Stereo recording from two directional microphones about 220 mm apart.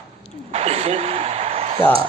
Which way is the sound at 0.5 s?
30° right (ahead or behind).